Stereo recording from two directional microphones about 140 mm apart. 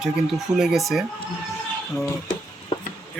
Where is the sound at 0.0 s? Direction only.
5° right (ahead or behind).